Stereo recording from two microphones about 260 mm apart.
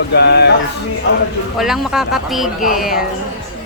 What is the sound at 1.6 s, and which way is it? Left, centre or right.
Speech, centre.